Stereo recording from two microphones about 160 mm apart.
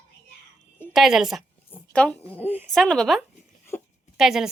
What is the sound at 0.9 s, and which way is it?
Speech, centre (ahead or behind).